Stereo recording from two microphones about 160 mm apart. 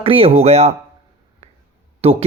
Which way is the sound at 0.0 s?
35° right (ahead or behind).